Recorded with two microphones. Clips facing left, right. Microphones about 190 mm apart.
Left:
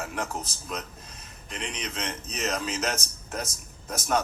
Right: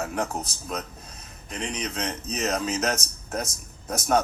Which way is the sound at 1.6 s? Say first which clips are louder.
Right 4 dB; 40° right (ahead or behind).